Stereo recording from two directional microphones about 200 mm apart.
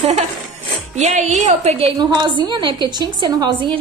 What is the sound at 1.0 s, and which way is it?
Speech, 35° right (ahead or behind).